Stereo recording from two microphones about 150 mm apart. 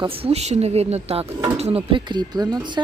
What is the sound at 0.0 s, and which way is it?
A woman's voice, 40° right (ahead or behind).